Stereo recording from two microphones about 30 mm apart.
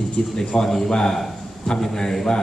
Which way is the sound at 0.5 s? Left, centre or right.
Left.